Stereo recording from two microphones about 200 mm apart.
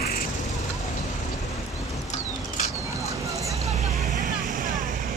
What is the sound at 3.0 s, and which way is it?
Vehicle, 15° right (ahead or behind).